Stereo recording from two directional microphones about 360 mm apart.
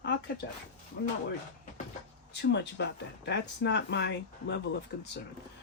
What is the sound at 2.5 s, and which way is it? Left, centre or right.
Speech, left.